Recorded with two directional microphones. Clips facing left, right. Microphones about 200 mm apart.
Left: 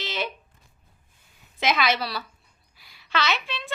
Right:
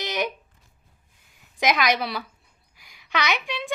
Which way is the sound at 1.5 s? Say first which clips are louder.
Right 2 dB; 15° right (ahead or behind).